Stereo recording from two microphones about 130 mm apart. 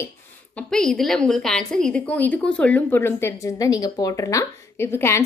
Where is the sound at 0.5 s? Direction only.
5° left (ahead or behind).